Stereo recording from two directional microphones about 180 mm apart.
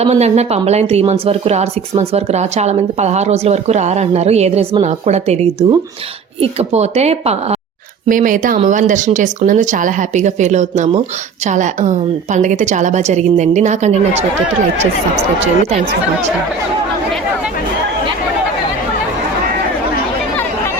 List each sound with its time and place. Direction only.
0.0 s a woman's voice: 35° right (ahead or behind)
8.0 s a woman's voice: 50° right (ahead or behind)